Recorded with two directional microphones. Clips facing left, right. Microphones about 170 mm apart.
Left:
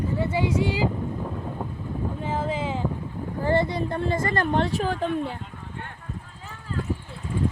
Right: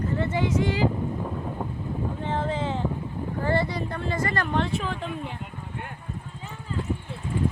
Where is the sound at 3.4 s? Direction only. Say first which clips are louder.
Left 3 dB; 20° left (ahead or behind).